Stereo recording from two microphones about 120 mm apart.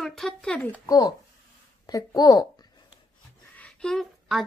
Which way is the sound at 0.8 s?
30° left (ahead or behind).